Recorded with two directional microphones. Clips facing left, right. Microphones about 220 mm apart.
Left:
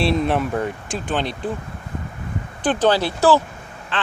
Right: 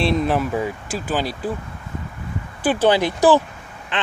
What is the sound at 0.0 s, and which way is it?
Speech, centre (ahead or behind).